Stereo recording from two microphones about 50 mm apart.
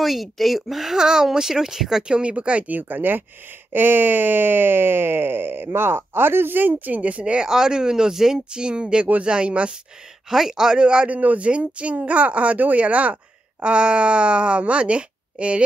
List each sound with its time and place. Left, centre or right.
0.0 s speech: centre; by 7.3 s right
7.3 s speech: centre
10.3 s speech: centre